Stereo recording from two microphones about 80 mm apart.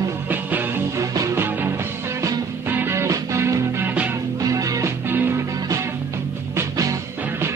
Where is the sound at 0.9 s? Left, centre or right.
Right.